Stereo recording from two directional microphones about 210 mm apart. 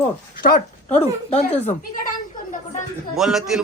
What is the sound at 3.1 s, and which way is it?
Speech, centre (ahead or behind).